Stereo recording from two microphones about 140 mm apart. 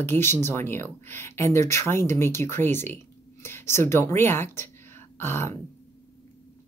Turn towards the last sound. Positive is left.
turn(degrees=15)  # may be behind; listen again after turning